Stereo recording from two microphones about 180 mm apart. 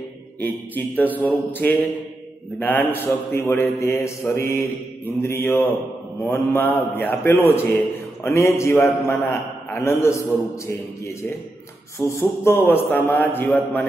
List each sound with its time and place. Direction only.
0.4 s a man's voice: 10° left (ahead or behind)
12.1 s a man's voice: 15° left (ahead or behind)